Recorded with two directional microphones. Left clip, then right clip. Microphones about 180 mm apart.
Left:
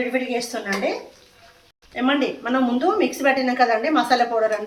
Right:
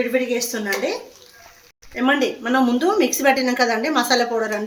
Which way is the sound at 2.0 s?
55° right (ahead or behind).